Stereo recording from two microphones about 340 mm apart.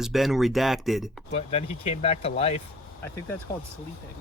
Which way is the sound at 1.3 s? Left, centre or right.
Centre.